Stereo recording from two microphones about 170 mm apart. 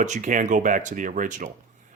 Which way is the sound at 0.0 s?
45° right (ahead or behind).